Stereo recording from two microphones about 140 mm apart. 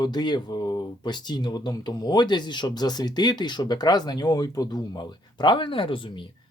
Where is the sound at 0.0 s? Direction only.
30° left (ahead or behind).